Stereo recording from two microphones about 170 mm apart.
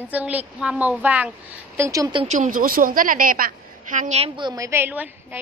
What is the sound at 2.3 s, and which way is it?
A woman's voice, 50° right (ahead or behind).